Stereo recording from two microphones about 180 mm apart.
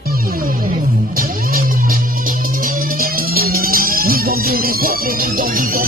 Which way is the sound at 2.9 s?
55° right (ahead or behind).